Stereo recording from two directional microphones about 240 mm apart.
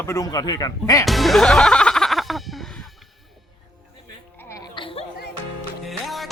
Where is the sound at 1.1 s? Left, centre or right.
Centre.